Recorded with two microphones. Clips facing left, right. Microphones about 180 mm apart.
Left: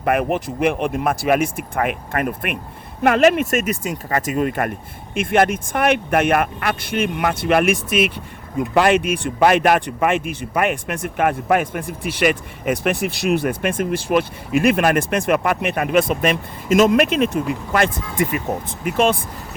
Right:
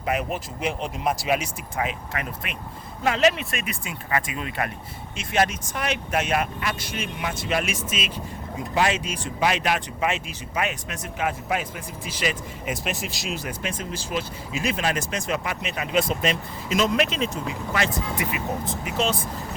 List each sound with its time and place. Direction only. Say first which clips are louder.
0.0 s speech: left 8 dB; 60° left (ahead or behind)